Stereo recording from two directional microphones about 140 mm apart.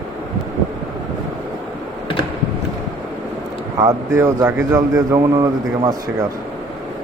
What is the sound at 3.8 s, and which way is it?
Speech, 25° right (ahead or behind).